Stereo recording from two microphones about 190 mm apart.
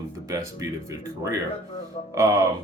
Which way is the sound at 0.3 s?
15° right (ahead or behind).